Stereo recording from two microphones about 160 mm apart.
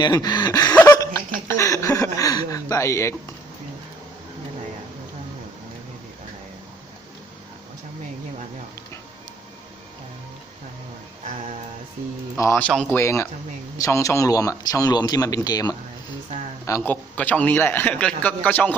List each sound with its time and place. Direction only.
0.0 s chuckle: 25° left (ahead or behind)
0.8 s laughter: 15° left (ahead or behind)
1.5 s a sound: 20° left (ahead or behind)
12.4 s a man's voice: 20° left (ahead or behind)